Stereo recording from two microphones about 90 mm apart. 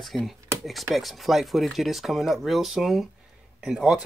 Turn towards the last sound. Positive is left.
turn(degrees=-5)  # may be behind; listen again after turning